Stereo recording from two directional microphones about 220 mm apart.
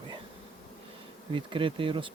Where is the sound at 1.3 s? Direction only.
25° right (ahead or behind).